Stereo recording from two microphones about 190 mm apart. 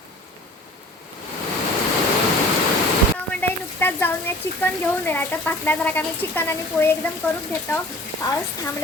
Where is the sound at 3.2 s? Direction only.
10° left (ahead or behind).